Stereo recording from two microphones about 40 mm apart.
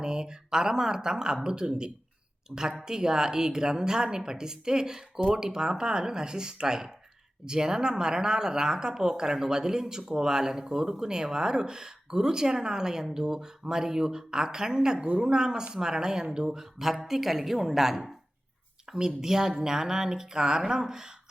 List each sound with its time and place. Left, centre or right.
0.0 s speech: centre